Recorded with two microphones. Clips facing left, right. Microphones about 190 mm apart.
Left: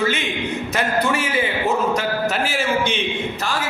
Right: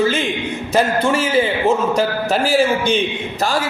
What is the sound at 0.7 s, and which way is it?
Speech, 30° right (ahead or behind).